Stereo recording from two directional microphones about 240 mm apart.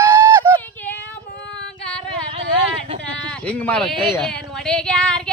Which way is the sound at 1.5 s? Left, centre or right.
Centre.